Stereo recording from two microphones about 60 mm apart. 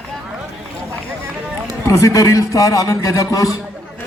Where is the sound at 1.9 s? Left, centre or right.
Left.